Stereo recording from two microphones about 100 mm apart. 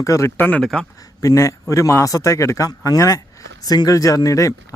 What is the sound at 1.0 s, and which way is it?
A man's voice, 30° left (ahead or behind).